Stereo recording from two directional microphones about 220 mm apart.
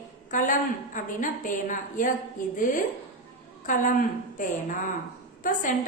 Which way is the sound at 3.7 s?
35° left (ahead or behind).